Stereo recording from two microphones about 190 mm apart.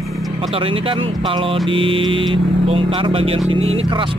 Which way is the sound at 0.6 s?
30° right (ahead or behind).